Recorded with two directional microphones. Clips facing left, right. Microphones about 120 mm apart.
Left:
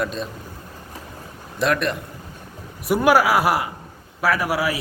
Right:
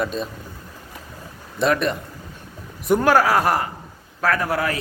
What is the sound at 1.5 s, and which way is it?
Speech, centre (ahead or behind).